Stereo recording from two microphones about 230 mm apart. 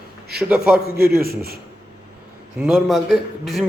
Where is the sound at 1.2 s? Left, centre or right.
Right.